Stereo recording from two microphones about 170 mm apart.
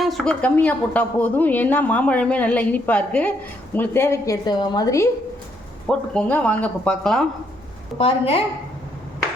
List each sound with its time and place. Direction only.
0.0 s a woman's voice: centre (ahead or behind); by 5.0 s 20° left (ahead or behind)
5.9 s speech: 5° left (ahead or behind)
7.9 s a woman's voice: 35° left (ahead or behind)